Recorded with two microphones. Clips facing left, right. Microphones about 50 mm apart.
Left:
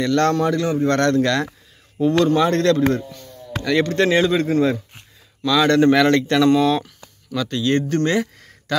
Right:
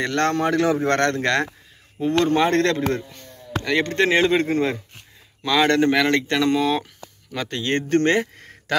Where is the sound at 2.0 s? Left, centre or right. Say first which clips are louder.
Left 3 dB; right.